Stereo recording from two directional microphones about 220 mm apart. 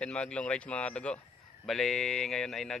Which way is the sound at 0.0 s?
5° left (ahead or behind).